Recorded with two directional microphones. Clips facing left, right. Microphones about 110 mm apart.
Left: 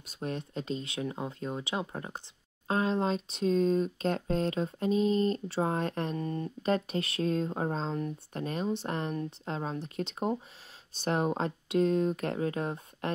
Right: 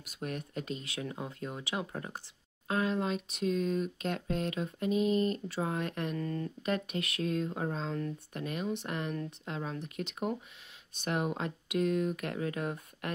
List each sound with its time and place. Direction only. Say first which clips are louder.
0.0 s speech: left 3 dB; 30° left (ahead or behind)
6.2 s speech: left 3 dB; 25° left (ahead or behind)